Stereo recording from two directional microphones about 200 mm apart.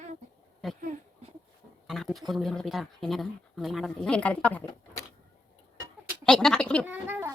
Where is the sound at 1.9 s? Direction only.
Centre (ahead or behind).